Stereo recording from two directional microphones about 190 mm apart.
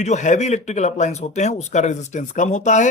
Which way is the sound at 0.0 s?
40° left (ahead or behind).